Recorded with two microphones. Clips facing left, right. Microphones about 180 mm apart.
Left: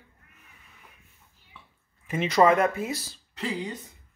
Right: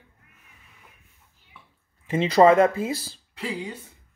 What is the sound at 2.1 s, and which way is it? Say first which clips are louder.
Speech: right 4 dB; 30° right (ahead or behind).